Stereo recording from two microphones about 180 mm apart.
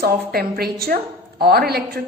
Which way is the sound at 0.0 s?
60° right (ahead or behind).